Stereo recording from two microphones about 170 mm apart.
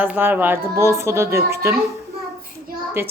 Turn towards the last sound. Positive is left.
turn(degrees=-15)  # may be behind; listen again after turning